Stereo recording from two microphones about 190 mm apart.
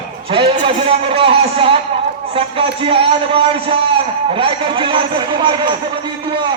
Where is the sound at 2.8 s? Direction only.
30° right (ahead or behind).